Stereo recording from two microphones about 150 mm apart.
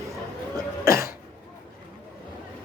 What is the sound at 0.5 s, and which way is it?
Cough, 20° right (ahead or behind).